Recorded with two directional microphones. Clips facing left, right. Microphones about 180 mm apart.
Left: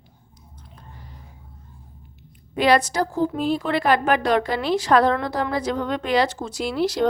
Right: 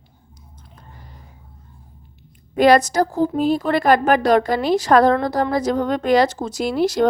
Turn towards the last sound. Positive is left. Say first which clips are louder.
# right 4 dB
turn(degrees=-45)  # may be behind; listen again after turning